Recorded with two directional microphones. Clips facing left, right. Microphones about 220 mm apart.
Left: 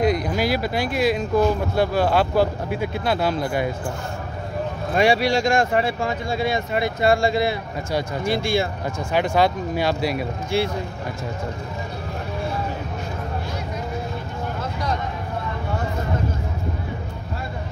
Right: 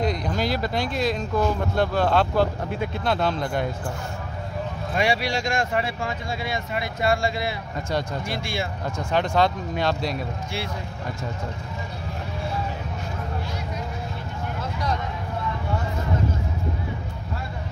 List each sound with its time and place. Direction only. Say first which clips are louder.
0.0 s speech: left 4 dB; 10° left (ahead or behind)
4.9 s speech: left 6 dB; 35° left (ahead or behind)
8.8 s speech: left 2 dB; 10° left (ahead or behind)